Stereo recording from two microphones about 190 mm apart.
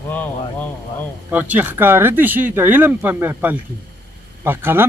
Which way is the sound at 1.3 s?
10° right (ahead or behind).